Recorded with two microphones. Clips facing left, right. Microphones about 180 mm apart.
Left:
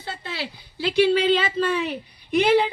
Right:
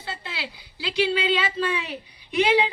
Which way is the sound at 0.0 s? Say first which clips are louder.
Left 3 dB; 45° left (ahead or behind).